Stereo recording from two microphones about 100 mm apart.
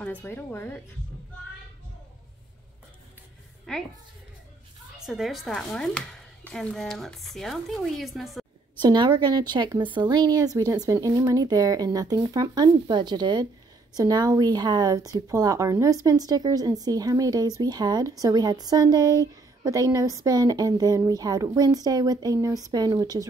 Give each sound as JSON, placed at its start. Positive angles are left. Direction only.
{"t": 0.0, "sound": "speech", "side_deg": 20}
{"t": 3.7, "sound": "a woman's voice", "side_deg": 10}
{"t": 4.9, "sound": "speech", "side_deg": -5}
{"t": 8.8, "sound": "a woman's voice", "side_deg": -50}